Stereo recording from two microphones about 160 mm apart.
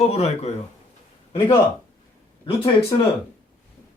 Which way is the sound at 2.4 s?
35° left (ahead or behind).